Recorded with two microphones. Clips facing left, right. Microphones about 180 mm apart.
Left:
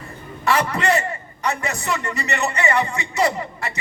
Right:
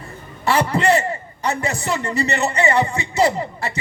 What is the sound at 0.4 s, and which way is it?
A man's voice, 30° right (ahead or behind).